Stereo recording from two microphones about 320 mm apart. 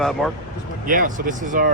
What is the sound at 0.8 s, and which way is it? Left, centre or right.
Speech, right.